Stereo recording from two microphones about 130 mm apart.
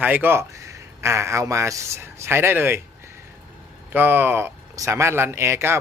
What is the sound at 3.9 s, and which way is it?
Speech, 15° right (ahead or behind).